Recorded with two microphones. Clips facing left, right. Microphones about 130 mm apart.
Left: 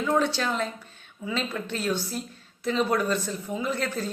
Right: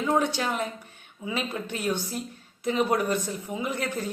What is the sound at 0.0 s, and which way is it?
A man's voice, 20° right (ahead or behind).